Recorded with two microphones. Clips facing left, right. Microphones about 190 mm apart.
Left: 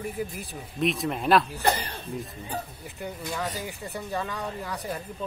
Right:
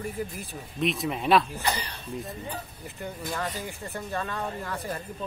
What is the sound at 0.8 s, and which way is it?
Speech, centre (ahead or behind).